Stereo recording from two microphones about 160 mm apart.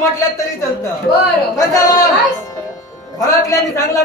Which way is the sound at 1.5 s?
20° left (ahead or behind).